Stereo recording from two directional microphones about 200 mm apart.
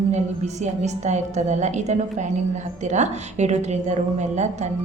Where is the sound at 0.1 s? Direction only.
35° right (ahead or behind).